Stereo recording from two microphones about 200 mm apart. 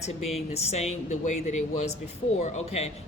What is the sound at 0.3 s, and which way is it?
Speech, 35° left (ahead or behind).